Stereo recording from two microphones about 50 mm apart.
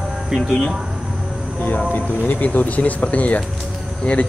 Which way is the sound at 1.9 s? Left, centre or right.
Left.